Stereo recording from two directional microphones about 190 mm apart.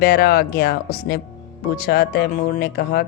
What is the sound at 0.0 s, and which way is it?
A woman's voice, 55° left (ahead or behind).